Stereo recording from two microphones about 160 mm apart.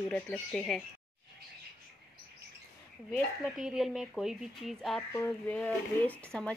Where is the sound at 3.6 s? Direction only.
Centre (ahead or behind).